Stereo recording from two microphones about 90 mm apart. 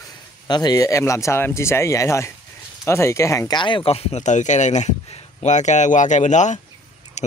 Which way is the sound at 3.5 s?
60° left (ahead or behind).